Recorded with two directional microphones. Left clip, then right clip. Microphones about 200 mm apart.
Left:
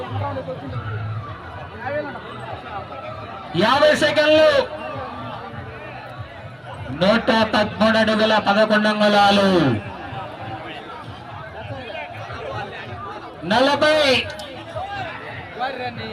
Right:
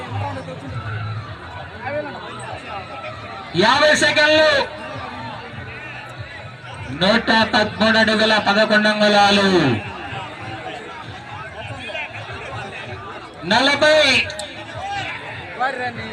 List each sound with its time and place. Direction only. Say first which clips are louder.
3.5 s a man's voice: right 1 dB; 20° left (ahead or behind)
7.0 s a man's voice: right 1 dB; 20° left (ahead or behind)
13.5 s a man's voice: right 2 dB; 20° left (ahead or behind)
15.6 s a sound: right 4 dB; 30° right (ahead or behind)